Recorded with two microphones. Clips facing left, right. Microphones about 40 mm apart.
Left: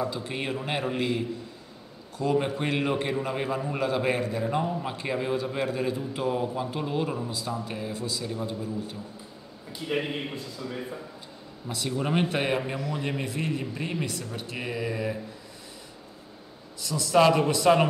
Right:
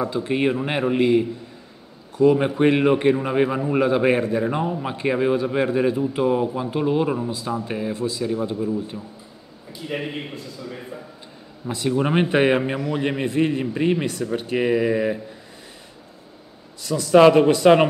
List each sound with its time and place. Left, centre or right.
0.0 s a man's voice: right
9.9 s a man's voice: centre
11.6 s a man's voice: right
16.8 s a man's voice: right